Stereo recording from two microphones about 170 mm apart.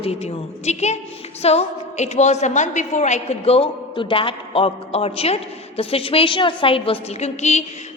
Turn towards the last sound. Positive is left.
turn(degrees=40)  # may be behind; listen again after turning